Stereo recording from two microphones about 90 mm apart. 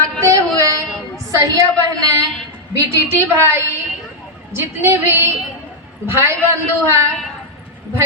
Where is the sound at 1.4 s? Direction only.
40° right (ahead or behind).